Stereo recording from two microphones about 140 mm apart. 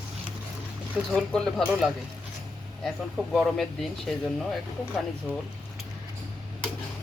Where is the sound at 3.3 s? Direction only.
Centre (ahead or behind).